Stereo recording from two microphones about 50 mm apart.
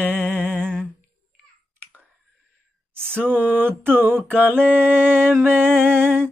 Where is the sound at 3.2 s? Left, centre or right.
Right.